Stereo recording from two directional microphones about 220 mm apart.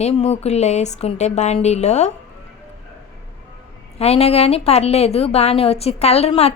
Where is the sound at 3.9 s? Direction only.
30° left (ahead or behind).